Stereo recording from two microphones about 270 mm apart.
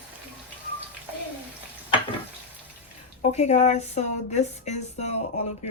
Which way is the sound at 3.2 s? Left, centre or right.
Left.